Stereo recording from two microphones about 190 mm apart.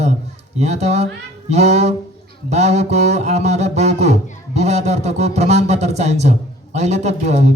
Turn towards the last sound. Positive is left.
turn(degrees=-35)  # may be behind; listen again after turning